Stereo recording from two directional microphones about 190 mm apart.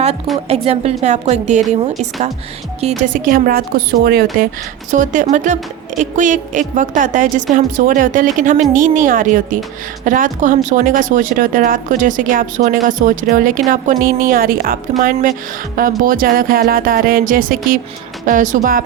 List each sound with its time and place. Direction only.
0.4 s a woman's voice: 35° right (ahead or behind)
2.8 s speech: 40° right (ahead or behind)
4.9 s a woman's voice: 40° right (ahead or behind)